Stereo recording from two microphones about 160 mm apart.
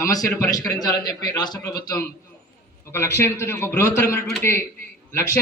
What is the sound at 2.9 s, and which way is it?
A man's voice, 15° left (ahead or behind).